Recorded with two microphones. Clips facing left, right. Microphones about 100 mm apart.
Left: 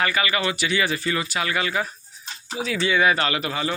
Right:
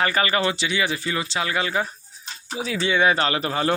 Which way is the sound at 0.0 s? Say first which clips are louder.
Right 2 dB; 35° right (ahead or behind).